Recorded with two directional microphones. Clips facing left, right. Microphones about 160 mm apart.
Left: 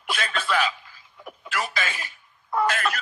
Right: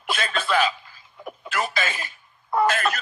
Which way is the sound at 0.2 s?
30° right (ahead or behind).